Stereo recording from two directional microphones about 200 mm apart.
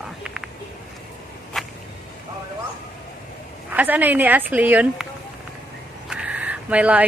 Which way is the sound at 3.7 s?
10° right (ahead or behind).